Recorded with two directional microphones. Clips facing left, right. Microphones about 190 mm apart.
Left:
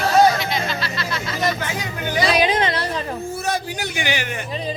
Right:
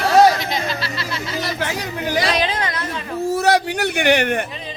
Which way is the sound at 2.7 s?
35° left (ahead or behind).